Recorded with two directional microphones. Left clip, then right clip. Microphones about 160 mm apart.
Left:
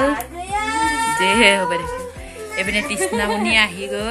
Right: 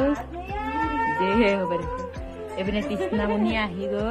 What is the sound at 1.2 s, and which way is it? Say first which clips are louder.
Speech: left 9 dB; 5° left (ahead or behind).